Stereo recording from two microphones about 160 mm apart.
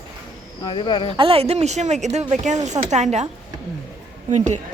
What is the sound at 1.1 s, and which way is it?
A woman's voice, 35° right (ahead or behind).